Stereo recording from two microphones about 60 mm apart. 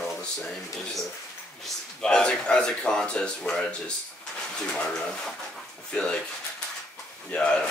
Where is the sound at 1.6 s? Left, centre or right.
Centre.